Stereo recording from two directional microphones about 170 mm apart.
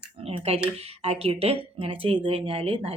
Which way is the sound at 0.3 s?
35° right (ahead or behind).